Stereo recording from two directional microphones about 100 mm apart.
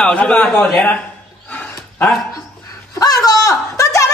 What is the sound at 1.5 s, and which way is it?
Dog, 15° left (ahead or behind).